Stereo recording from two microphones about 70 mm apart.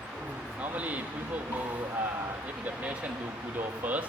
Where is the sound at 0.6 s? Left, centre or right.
Right.